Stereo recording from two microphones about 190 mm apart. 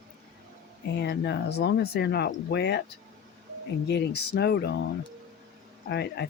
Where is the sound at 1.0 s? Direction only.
60° left (ahead or behind).